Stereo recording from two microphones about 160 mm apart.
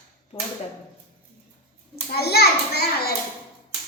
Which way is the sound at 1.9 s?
80° left.